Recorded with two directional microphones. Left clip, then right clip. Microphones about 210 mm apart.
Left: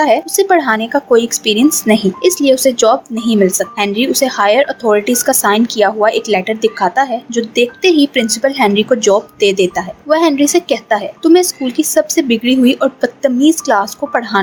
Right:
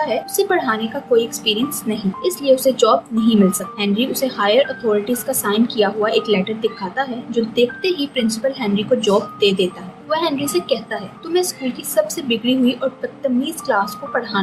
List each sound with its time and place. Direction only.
0.0 s a woman's voice: 45° left (ahead or behind)